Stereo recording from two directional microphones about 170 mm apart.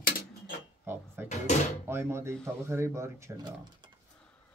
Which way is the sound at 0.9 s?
15° right (ahead or behind).